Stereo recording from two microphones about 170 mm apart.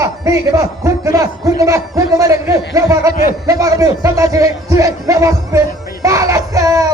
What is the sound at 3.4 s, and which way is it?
Speech, 20° right (ahead or behind).